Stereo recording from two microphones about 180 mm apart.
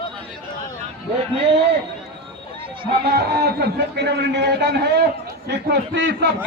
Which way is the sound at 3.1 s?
65° right (ahead or behind).